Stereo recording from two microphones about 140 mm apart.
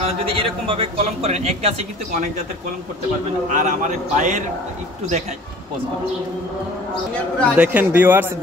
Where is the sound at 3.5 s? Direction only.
60° right (ahead or behind).